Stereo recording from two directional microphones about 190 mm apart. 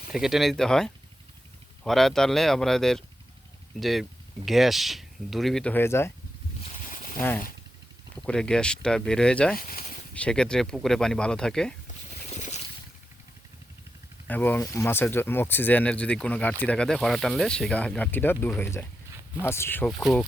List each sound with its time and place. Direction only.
0.1 s speech: centre (ahead or behind)
7.2 s speech: 10° left (ahead or behind)
9.6 s speech: 50° left (ahead or behind)
10.2 s speech: 5° left (ahead or behind)
12.4 s boat: 35° left (ahead or behind)
14.3 s speech: 10° left (ahead or behind)